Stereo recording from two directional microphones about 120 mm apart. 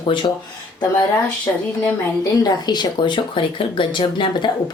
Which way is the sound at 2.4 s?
35° left (ahead or behind).